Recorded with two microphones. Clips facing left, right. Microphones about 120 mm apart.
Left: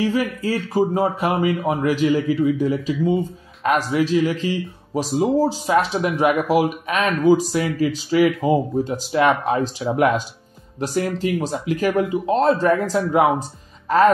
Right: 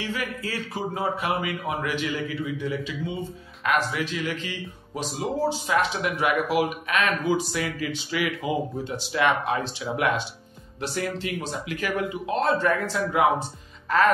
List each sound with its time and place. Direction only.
0.0 s a man's voice: 40° left (ahead or behind)